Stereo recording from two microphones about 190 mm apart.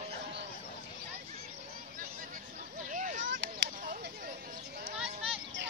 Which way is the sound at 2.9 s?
40° right (ahead or behind).